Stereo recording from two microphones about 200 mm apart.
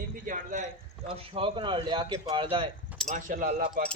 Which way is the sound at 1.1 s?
30° right (ahead or behind).